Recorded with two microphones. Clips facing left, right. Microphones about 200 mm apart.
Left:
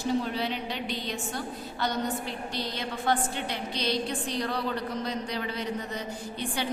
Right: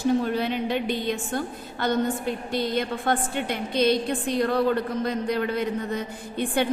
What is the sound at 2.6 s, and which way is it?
A woman's voice, 55° right (ahead or behind).